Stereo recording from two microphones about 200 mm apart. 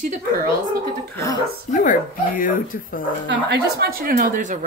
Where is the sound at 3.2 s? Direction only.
55° right (ahead or behind).